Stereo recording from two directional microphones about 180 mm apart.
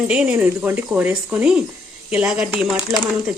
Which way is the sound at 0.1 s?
10° right (ahead or behind).